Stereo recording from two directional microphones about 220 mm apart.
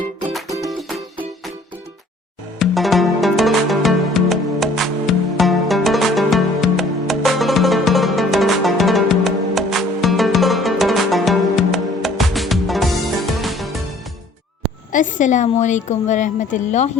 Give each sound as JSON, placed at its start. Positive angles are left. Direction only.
{"t": 0.4, "sound": "music", "side_deg": -15}
{"t": 0.7, "sound": "music", "side_deg": 0}
{"t": 2.6, "sound": "music", "side_deg": 0}
{"t": 14.9, "sound": "a woman's voice", "side_deg": 35}